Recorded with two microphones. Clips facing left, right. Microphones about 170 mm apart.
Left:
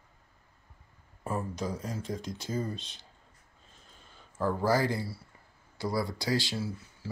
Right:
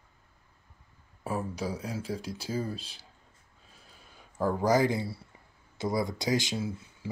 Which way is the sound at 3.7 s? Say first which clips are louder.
Right 1 dB; 10° right (ahead or behind).